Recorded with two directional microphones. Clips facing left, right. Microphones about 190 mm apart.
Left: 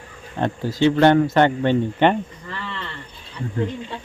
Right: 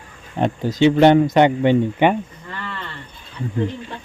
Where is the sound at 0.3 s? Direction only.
15° right (ahead or behind).